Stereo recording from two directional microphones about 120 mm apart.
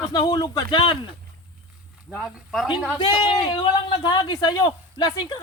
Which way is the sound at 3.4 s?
40° left (ahead or behind).